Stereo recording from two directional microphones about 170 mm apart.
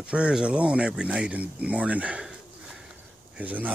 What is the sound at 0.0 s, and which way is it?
Speech, 5° right (ahead or behind).